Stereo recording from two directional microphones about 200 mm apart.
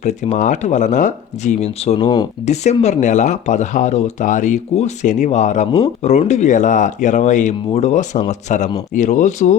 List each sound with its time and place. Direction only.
0.0 s speech: 35° left (ahead or behind)